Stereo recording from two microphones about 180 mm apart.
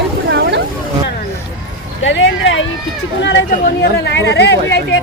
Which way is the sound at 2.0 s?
90° left.